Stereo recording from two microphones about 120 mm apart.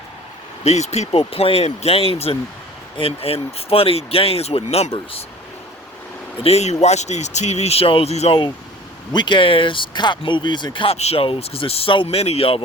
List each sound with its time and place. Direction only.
0.6 s speech: 65° left (ahead or behind)
1.2 s speech: 50° left (ahead or behind)
6.4 s speech: 65° left (ahead or behind)
9.1 s speech: 40° left (ahead or behind)
10.9 s speech: 60° left (ahead or behind)